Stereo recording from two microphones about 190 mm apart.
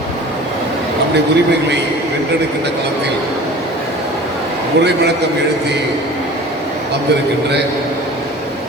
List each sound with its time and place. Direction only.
4.8 s a man's voice: 60° right (ahead or behind)